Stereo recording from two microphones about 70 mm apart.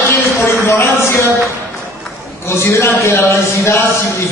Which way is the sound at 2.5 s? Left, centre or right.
Left.